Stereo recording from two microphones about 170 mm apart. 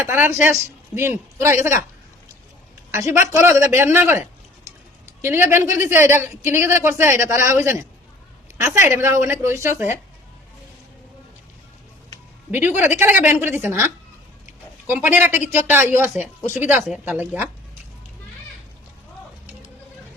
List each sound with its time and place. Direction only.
0.0 s a man's voice: 10° right (ahead or behind)
2.9 s a man's voice: 15° right (ahead or behind)
5.2 s a man's voice: 15° right (ahead or behind)
12.5 s a man's voice: 10° right (ahead or behind)